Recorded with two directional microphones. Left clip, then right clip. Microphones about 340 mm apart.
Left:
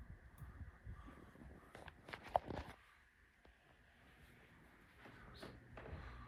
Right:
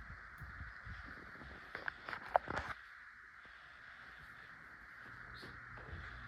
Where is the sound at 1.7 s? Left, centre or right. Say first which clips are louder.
Right 11 dB; left.